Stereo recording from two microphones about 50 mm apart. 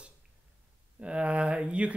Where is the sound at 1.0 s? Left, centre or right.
Right.